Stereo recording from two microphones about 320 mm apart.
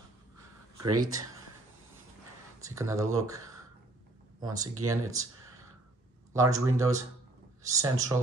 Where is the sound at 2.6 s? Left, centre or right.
Centre.